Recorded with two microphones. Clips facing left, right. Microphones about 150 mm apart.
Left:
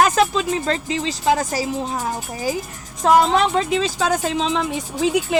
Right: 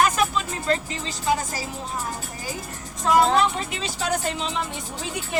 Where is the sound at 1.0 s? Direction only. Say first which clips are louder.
Left 6 dB; 90° left.